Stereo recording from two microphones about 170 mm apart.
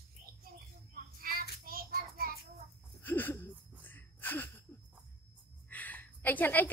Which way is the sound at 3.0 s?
10° left (ahead or behind).